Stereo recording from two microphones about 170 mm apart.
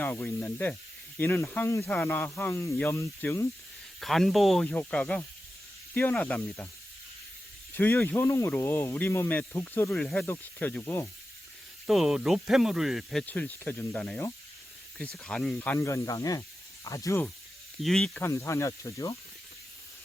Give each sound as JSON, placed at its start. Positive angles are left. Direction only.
{"t": 0.0, "sound": "speech", "side_deg": 10}
{"t": 4.0, "sound": "speech", "side_deg": 0}
{"t": 7.7, "sound": "speech", "side_deg": 10}
{"t": 11.9, "sound": "speech", "side_deg": 0}
{"t": 17.7, "sound": "speech", "side_deg": 0}
{"t": 18.3, "sound": "speech", "side_deg": 15}